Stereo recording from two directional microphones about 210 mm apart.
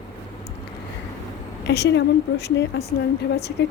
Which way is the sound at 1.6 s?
55° left (ahead or behind).